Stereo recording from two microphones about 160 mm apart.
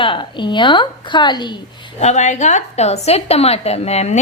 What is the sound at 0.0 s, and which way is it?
A woman's voice, 30° left (ahead or behind).